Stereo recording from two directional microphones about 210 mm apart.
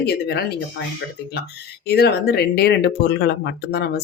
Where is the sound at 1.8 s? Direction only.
50° left (ahead or behind).